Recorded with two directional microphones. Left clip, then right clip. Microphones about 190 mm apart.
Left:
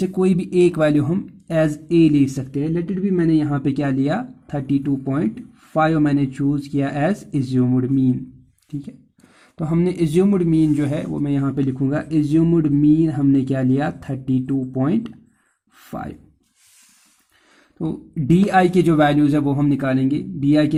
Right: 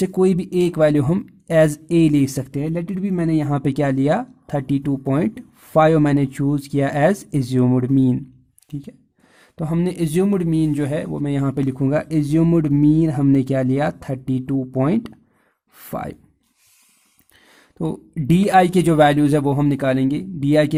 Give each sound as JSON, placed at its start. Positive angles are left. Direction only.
{"t": 0.0, "sound": "speech", "side_deg": -40}
{"t": 9.6, "sound": "speech", "side_deg": -35}
{"t": 17.7, "sound": "speech", "side_deg": -40}